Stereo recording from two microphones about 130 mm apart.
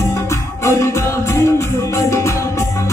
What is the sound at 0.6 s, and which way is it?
Music, 20° left (ahead or behind).